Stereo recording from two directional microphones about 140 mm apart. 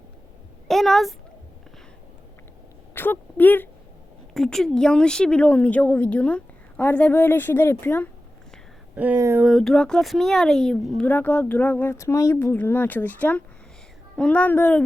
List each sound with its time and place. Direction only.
0.7 s a woman's voice: centre (ahead or behind)
2.9 s speech: 15° left (ahead or behind)
9.1 s a sound: 20° right (ahead or behind)
9.4 s speech: centre (ahead or behind)